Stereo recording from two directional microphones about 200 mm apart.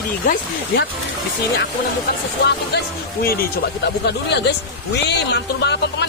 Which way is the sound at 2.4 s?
60° left (ahead or behind).